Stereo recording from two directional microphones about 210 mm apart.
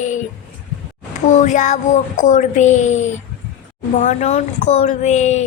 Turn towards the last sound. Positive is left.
turn(degrees=35)  # may be behind; listen again after turning